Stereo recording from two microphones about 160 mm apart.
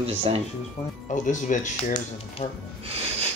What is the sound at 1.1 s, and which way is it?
Speech, 50° left (ahead or behind).